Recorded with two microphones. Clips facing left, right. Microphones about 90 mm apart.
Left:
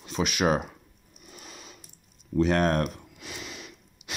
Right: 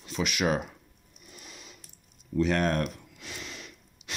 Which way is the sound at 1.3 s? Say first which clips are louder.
Left 3 dB; 25° left (ahead or behind).